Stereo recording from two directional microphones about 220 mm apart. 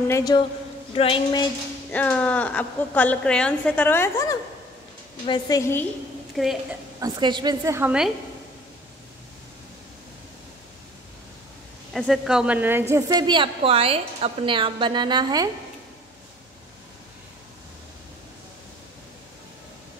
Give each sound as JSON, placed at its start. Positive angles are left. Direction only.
{"t": 0.1, "sound": "a woman's voice", "side_deg": 20}
{"t": 0.9, "sound": "a sound", "side_deg": 25}
{"t": 1.9, "sound": "a woman's voice", "side_deg": 5}
{"t": 6.3, "sound": "a woman's voice", "side_deg": 0}
{"t": 7.0, "sound": "a woman's voice", "side_deg": -20}
{"t": 11.9, "sound": "a woman's voice", "side_deg": 0}